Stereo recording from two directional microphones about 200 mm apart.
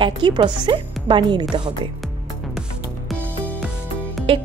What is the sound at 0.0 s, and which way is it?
Speech, 25° right (ahead or behind).